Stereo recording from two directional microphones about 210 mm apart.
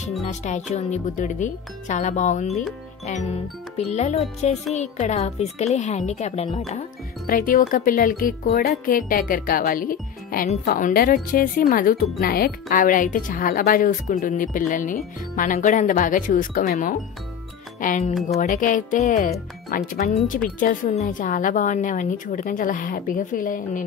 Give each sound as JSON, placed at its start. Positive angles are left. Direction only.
{"t": 0.2, "sound": "speech", "side_deg": 35}